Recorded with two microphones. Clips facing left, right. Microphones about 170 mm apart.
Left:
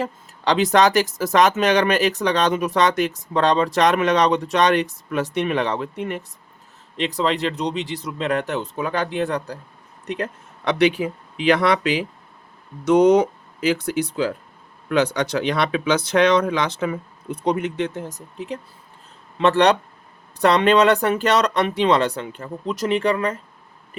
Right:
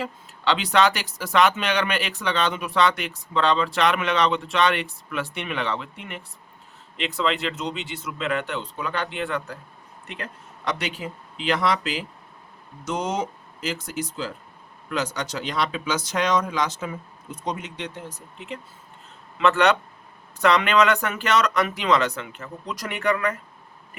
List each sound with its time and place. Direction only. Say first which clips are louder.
0.0 s speech: left 3 dB; 45° left (ahead or behind)
10.2 s speech: left 8 dB; 60° left (ahead or behind)
12.8 s speech: left 13 dB; 65° left (ahead or behind); by 23.4 s 30° left (ahead or behind)